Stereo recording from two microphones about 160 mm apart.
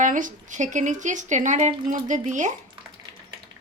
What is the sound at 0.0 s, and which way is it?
Speech, 55° right (ahead or behind).